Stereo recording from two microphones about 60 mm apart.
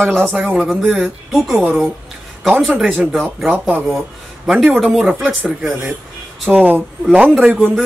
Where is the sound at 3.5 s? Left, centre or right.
Right.